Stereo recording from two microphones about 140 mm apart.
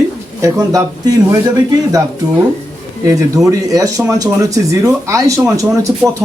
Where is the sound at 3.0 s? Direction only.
25° right (ahead or behind).